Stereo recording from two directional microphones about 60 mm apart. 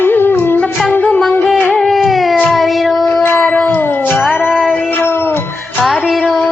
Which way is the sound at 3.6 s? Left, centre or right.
Left.